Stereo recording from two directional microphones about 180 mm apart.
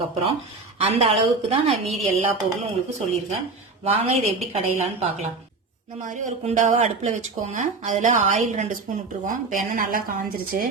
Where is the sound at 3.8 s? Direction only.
35° right (ahead or behind).